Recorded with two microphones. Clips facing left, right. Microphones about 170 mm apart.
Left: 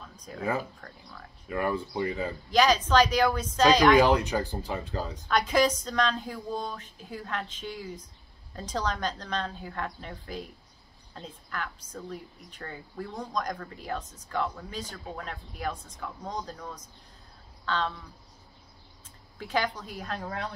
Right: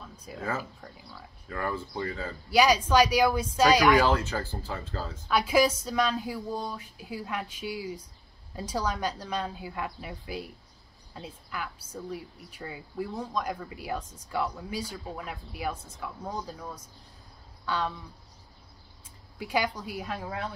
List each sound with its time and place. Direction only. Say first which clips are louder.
0.1 s a sound: even; 5° right (ahead or behind)
0.4 s speech: left 3 dB; 15° left (ahead or behind)
2.5 s a woman's voice: right 1 dB; 10° right (ahead or behind)
4.0 s speech: left 3 dB; 15° left (ahead or behind)
5.3 s a woman's voice: right 1 dB; 10° right (ahead or behind)
19.3 s a woman's voice: right 1 dB; 10° right (ahead or behind)